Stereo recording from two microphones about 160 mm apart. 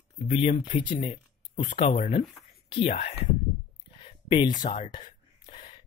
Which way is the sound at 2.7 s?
40° left (ahead or behind).